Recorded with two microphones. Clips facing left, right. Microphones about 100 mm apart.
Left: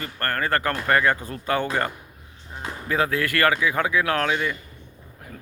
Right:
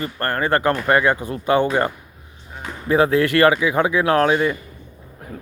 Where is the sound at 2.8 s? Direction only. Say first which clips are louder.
Right 8 dB; 25° right (ahead or behind).